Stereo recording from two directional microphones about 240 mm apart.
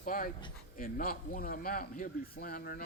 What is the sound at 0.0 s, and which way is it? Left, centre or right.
Speech, left.